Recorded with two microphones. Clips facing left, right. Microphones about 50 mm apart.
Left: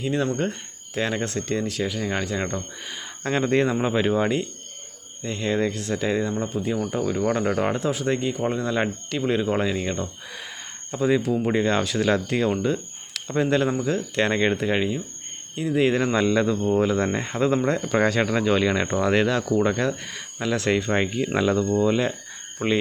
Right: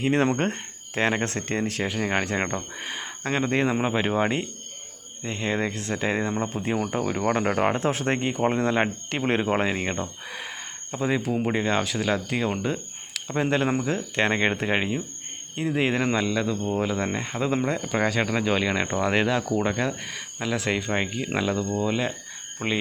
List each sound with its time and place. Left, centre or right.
0.0 s speech: right
3.2 s speech: centre; by 6.8 s right
6.8 s speech: right
7.9 s speech: right; by 11.2 s centre
11.2 s speech: right
11.4 s speech: centre
16.1 s speech: centre